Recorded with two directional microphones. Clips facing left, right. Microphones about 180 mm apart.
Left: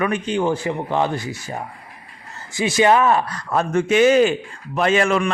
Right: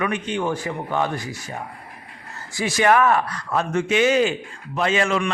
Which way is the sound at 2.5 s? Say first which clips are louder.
Left 2 dB; 20° left (ahead or behind).